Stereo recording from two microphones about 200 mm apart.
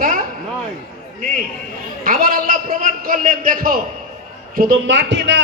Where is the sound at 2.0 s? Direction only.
45° right (ahead or behind).